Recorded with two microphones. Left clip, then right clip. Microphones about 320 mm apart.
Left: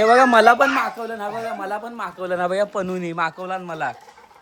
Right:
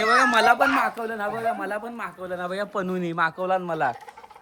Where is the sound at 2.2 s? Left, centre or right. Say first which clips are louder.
Left 9 dB; left.